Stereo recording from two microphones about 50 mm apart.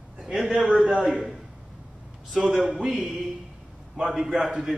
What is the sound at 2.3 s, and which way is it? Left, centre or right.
Speech, centre.